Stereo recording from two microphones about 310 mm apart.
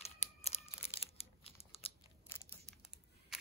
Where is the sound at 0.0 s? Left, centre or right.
Left.